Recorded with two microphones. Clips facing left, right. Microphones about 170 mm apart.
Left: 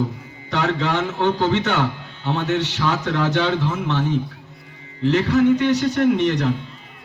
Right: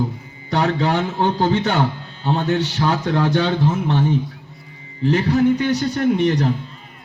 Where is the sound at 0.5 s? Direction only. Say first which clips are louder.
Right 2 dB; 35° right (ahead or behind).